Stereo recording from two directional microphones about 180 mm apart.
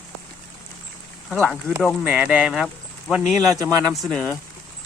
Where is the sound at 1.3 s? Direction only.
5° left (ahead or behind).